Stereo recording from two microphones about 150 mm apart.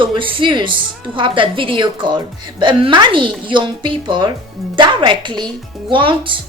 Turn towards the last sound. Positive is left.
turn(degrees=-35)  # may be behind; listen again after turning